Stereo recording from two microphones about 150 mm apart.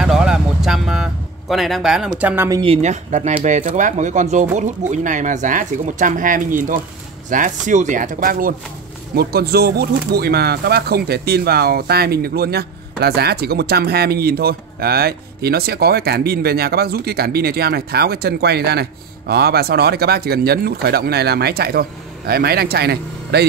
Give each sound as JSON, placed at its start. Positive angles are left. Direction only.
{"t": 0.0, "sound": "vehicle", "side_deg": -5}
{"t": 2.6, "sound": "speech", "side_deg": -45}
{"t": 9.1, "sound": "speech", "side_deg": -90}